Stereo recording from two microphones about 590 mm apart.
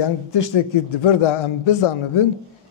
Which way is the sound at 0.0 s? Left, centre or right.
Left.